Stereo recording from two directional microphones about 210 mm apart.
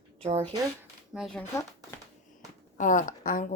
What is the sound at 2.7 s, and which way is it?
Speech, 40° left (ahead or behind).